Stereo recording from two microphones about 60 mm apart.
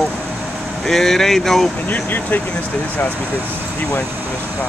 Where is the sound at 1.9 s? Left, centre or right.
Left.